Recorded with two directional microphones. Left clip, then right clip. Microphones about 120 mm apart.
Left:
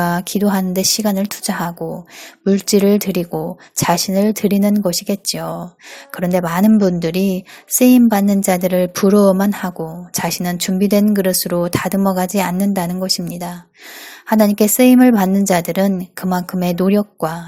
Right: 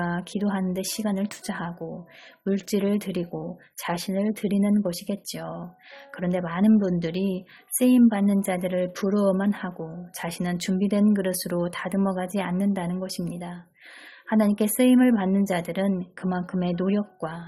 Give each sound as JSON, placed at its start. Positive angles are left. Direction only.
{"t": 0.0, "sound": "a woman's voice", "side_deg": 40}